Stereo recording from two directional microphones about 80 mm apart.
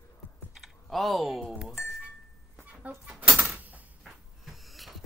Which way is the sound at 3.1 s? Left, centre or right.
Centre.